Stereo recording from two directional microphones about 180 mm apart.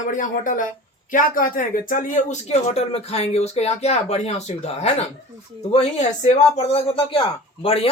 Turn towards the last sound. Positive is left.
turn(degrees=30)  # may be behind; listen again after turning